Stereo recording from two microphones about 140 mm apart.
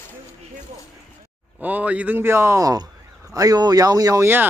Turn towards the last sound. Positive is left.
turn(degrees=-25)  # may be behind; listen again after turning